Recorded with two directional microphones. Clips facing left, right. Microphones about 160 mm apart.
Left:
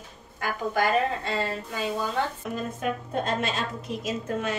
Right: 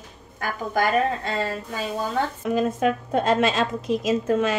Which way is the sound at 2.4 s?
90° right.